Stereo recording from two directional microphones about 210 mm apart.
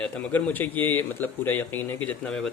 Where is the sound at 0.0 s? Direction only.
5° left (ahead or behind).